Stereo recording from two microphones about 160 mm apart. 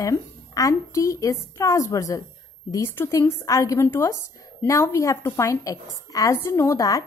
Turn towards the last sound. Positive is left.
turn(degrees=20)  # may be behind; listen again after turning